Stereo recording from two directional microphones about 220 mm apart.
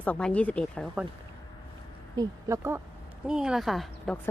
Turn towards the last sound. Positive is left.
turn(degrees=0)  # may be behind; listen again after turning